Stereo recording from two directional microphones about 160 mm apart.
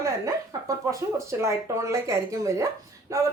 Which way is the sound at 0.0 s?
20° right (ahead or behind).